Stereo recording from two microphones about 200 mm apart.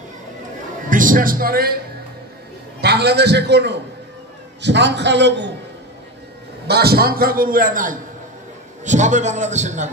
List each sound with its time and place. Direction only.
0.8 s a man's voice: 40° right (ahead or behind)
2.8 s a man's voice: 55° right (ahead or behind)
6.7 s a man's voice: 50° right (ahead or behind); by 9.8 s 35° right (ahead or behind)